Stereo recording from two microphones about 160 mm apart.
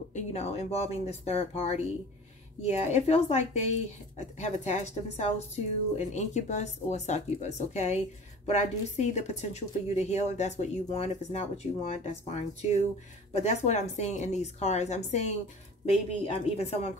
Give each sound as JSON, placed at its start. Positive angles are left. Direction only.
{"t": 0.1, "sound": "a woman's voice", "side_deg": 45}